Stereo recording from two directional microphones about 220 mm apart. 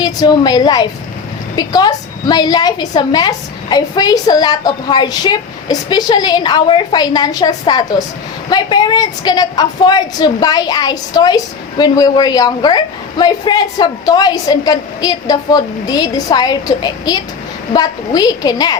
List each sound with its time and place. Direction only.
0.0 s a woman's voice: 15° left (ahead or behind)